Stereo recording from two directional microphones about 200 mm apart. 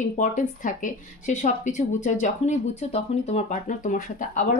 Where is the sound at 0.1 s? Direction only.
40° left (ahead or behind).